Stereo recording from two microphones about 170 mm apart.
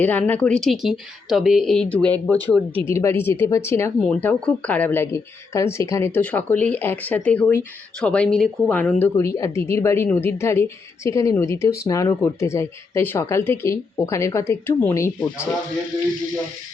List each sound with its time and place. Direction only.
0.0 s speech: 10° left (ahead or behind)